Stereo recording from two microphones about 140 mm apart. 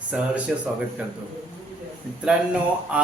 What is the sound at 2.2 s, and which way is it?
Speech, 5° right (ahead or behind).